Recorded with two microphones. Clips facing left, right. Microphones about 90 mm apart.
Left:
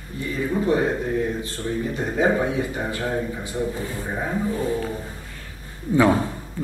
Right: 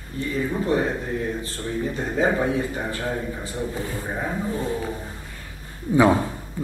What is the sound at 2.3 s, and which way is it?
Speech, 5° left (ahead or behind).